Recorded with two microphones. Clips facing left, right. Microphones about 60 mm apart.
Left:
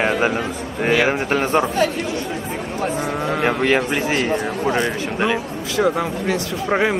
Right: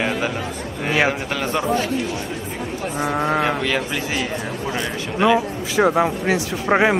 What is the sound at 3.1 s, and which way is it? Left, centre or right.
Speech, right.